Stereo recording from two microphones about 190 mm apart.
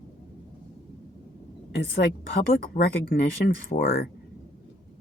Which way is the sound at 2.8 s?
40° left (ahead or behind).